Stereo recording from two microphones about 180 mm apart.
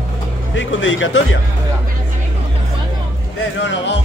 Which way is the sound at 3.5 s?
80° left.